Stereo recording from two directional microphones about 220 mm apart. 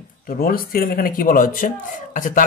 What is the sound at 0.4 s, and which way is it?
Speech, 40° left (ahead or behind).